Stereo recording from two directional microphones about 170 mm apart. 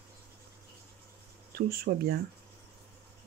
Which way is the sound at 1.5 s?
65° right (ahead or behind).